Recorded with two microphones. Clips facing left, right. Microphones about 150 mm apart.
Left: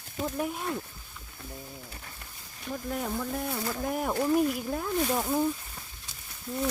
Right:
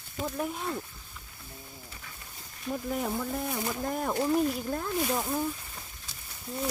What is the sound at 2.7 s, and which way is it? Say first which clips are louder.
Speech: right 1 dB; 5° right (ahead or behind).